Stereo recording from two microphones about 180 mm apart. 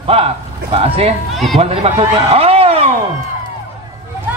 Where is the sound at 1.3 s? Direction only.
Centre (ahead or behind).